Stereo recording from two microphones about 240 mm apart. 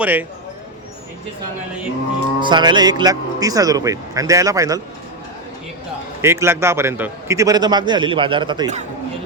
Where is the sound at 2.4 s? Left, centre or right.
Centre.